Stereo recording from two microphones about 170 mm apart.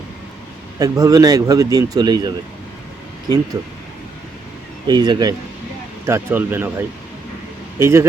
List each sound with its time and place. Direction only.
0.8 s speech: 20° right (ahead or behind)
4.9 s speech: 25° right (ahead or behind)